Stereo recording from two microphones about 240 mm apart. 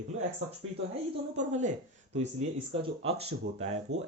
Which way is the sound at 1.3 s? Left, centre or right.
Right.